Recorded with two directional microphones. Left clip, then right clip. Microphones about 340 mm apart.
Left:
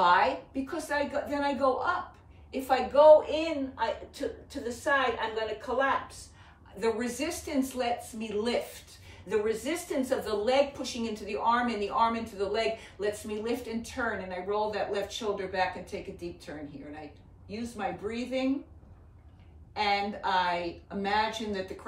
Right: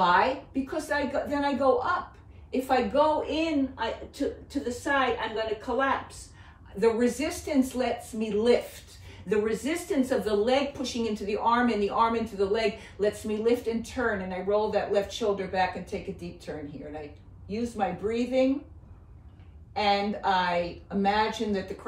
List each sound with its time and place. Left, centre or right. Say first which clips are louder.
0.0 s speech: right 1 dB; centre
6.8 s speech: right 6 dB; centre
17.5 s speech: right 5 dB; centre
19.7 s speech: right 3 dB; centre